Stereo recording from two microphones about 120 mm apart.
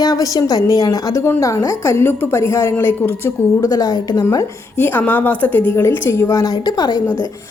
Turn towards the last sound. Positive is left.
turn(degrees=35)  # may be behind; listen again after turning